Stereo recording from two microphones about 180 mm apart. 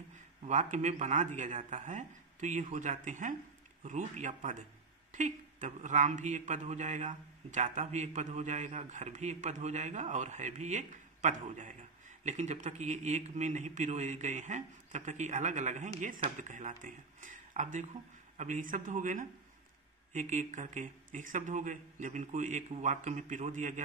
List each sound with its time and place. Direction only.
0.4 s speech: 40° right (ahead or behind)